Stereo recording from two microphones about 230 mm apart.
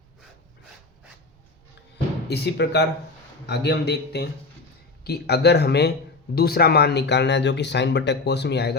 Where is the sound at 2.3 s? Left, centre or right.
Left.